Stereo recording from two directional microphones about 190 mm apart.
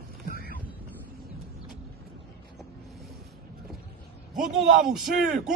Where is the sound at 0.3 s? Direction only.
50° left (ahead or behind).